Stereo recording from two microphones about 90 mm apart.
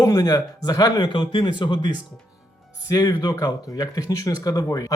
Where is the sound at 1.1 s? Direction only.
70° left (ahead or behind).